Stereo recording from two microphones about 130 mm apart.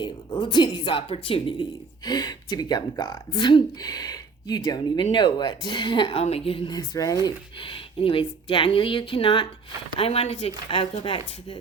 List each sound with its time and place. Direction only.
0.0 s speech: 35° left (ahead or behind)
2.0 s speech: 30° left (ahead or behind); by 6.7 s 45° left (ahead or behind)
6.7 s speech: 25° left (ahead or behind)